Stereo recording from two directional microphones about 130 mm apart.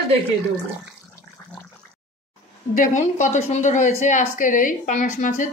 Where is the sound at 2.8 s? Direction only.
70° left (ahead or behind).